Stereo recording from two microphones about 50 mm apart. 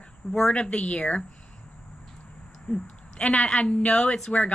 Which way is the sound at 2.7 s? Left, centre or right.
Centre.